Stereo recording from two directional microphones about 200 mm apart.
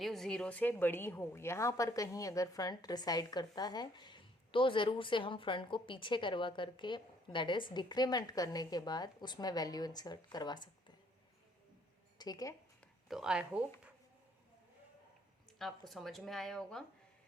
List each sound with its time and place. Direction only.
0.0 s a woman's voice: centre (ahead or behind); by 10.9 s 20° left (ahead or behind)
12.1 s speech: 20° left (ahead or behind)
12.8 s speech: centre (ahead or behind)
15.5 s speech: centre (ahead or behind)